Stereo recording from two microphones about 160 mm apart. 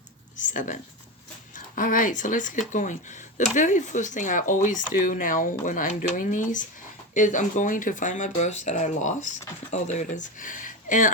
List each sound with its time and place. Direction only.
0.5 s speech: 55° left (ahead or behind)